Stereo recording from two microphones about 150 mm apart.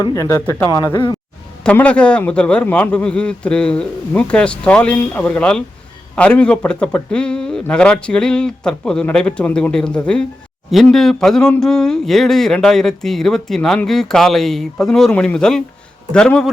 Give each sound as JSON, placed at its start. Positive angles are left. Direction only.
{"t": 0.0, "sound": "speech", "side_deg": 20}